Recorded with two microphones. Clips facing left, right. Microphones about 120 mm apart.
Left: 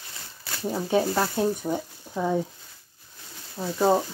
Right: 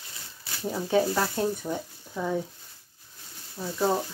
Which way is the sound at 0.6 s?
10° left (ahead or behind).